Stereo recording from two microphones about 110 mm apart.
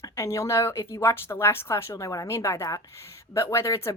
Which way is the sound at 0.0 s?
30° left (ahead or behind).